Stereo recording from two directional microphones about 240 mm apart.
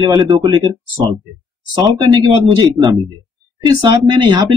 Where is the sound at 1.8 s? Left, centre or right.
Centre.